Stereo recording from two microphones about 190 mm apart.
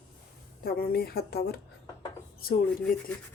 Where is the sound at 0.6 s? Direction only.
55° left (ahead or behind).